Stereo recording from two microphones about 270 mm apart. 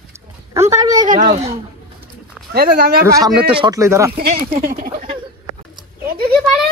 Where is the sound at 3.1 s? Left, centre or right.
Centre.